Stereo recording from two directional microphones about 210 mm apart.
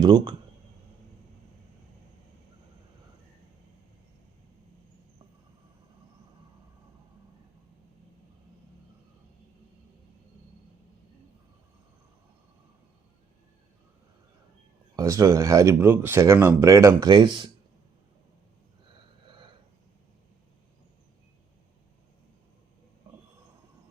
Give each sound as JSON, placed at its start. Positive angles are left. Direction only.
{"t": 0.0, "sound": "speech", "side_deg": -20}
{"t": 14.9, "sound": "speech", "side_deg": -15}